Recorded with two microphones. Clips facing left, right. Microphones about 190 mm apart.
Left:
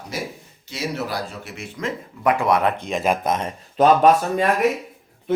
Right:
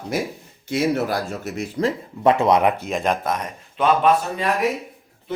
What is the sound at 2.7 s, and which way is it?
Speech, 5° right (ahead or behind).